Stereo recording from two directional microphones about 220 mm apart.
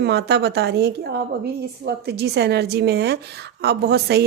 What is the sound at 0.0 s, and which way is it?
A woman's voice, 50° right (ahead or behind).